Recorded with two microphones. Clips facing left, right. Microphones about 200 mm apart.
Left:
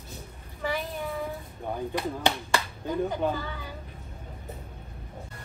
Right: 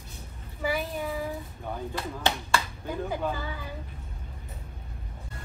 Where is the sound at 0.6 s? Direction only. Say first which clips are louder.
Right 1 dB; 5° right (ahead or behind).